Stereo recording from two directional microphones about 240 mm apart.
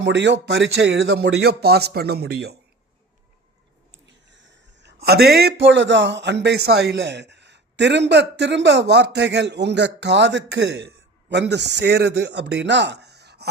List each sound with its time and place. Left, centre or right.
0.0 s speech: right
4.0 s speech: right